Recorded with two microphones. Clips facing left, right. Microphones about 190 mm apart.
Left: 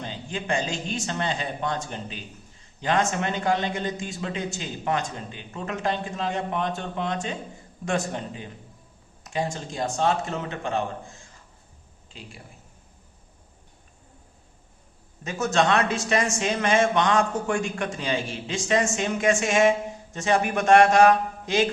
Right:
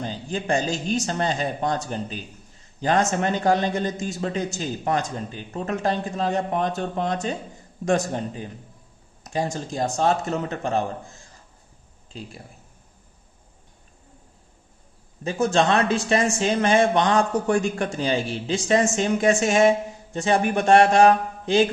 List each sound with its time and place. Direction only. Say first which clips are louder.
0.0 s speech: right 4 dB; 40° right (ahead or behind)
15.2 s speech: right 3 dB; 30° right (ahead or behind)